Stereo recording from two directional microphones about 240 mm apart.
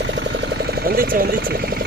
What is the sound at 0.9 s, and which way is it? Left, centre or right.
Speech, right.